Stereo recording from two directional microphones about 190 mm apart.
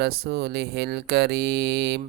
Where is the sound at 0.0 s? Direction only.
55° right (ahead or behind).